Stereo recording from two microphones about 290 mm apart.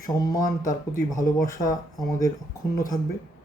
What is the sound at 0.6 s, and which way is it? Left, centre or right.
Speech, left.